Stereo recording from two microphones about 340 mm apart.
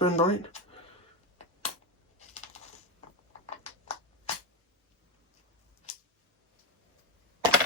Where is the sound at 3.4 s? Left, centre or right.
Centre.